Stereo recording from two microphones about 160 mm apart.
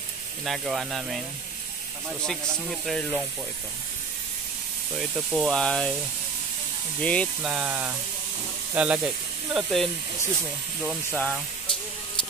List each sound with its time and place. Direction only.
0.5 s speech: centre (ahead or behind)
2.2 s speech: 5° left (ahead or behind)
5.1 s speech: 5° right (ahead or behind)
7.0 s speech: 5° left (ahead or behind)
7.4 s speech: 5° right (ahead or behind)